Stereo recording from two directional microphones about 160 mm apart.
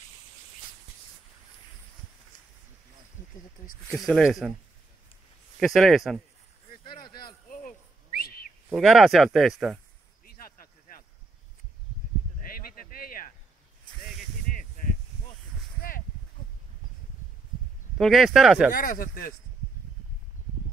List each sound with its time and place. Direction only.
3.9 s speech: centre (ahead or behind)
5.6 s speech: centre (ahead or behind)
7.0 s a sound: 70° left (ahead or behind)
7.4 s a sound: 55° left (ahead or behind)
8.6 s speech: centre (ahead or behind)
12.4 s a sound: 60° left (ahead or behind)
14.5 s spray: 60° left (ahead or behind)
17.9 s speech: centre (ahead or behind)
18.7 s speech: 65° left (ahead or behind)